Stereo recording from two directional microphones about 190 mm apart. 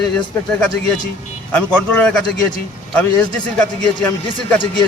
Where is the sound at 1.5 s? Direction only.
5° left (ahead or behind).